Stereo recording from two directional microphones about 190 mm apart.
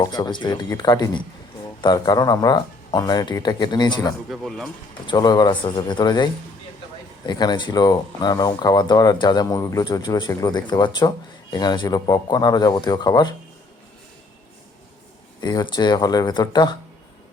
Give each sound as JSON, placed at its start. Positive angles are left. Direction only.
{"t": 0.0, "sound": "speech", "side_deg": 20}
{"t": 4.3, "sound": "speech", "side_deg": 0}
{"t": 5.0, "sound": "speech", "side_deg": 20}
{"t": 15.4, "sound": "speech", "side_deg": 20}